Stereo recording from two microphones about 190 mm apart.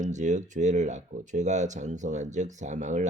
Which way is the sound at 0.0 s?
40° right (ahead or behind).